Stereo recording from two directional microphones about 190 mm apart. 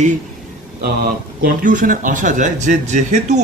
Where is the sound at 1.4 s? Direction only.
45° right (ahead or behind).